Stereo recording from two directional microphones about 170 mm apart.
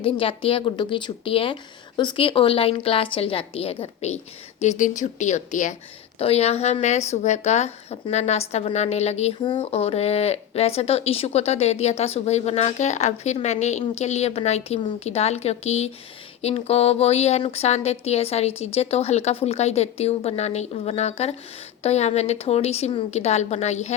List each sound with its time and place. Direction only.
0.0 s speech: 30° left (ahead or behind)
9.4 s speech: 25° left (ahead or behind)